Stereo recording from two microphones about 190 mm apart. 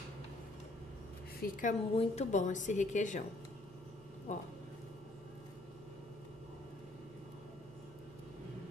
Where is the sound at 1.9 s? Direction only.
35° left (ahead or behind).